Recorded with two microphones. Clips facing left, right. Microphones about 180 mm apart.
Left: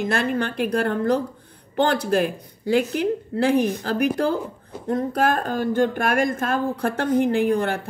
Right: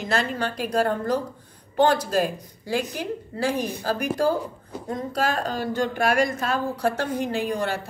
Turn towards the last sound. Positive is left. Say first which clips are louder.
# left 5 dB
turn(degrees=55)  # may be behind; listen again after turning